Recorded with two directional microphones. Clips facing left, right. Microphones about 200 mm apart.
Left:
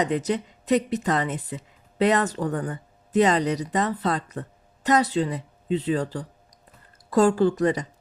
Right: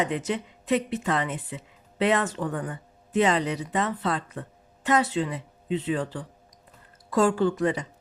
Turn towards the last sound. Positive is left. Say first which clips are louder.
# left 3 dB
turn(degrees=40)  # may be behind; listen again after turning